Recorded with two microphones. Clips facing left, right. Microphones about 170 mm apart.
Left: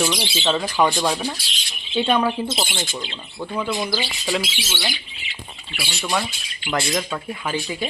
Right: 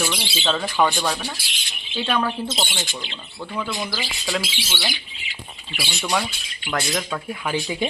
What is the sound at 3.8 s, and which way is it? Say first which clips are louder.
Speech: left 4 dB; 35° left (ahead or behind).